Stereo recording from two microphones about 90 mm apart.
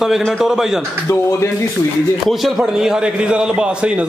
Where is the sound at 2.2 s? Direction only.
Centre (ahead or behind).